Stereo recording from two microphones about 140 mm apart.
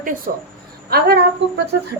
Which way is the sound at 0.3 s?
85° right.